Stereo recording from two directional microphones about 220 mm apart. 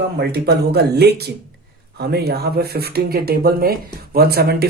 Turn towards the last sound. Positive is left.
turn(degrees=-45)  # may be behind; listen again after turning